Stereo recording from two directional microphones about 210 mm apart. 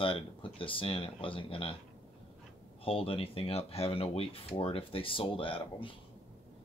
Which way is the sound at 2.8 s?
25° left (ahead or behind).